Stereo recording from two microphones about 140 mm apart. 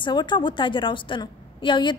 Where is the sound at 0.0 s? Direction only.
35° left (ahead or behind).